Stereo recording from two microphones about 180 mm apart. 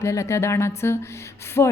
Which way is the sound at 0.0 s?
15° left (ahead or behind).